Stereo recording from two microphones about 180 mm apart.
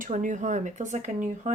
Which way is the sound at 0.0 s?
45° right (ahead or behind).